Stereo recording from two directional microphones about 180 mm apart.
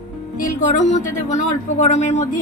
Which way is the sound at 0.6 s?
40° left (ahead or behind).